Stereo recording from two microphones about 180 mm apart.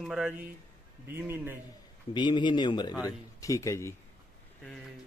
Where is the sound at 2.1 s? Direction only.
25° left (ahead or behind).